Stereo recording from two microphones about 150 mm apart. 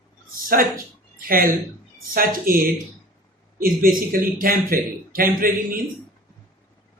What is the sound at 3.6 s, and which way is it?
A man's voice, 75° right (ahead or behind).